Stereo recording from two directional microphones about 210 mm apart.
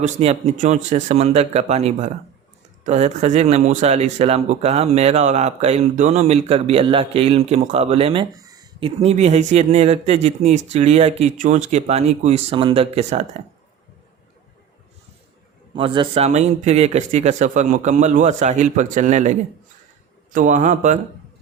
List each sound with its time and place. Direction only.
0.0 s speech: 30° right (ahead or behind)
9.0 s speech: 30° right (ahead or behind)
15.7 s speech: 25° right (ahead or behind)